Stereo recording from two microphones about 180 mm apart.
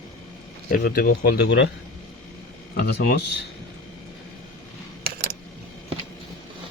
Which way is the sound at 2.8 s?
55° left (ahead or behind).